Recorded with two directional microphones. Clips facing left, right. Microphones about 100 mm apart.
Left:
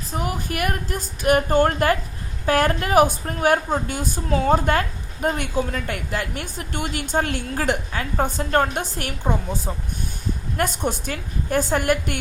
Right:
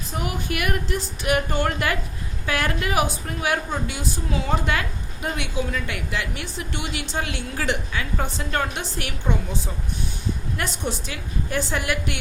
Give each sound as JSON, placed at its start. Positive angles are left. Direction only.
{"t": 0.2, "sound": "a woman's voice", "side_deg": 40}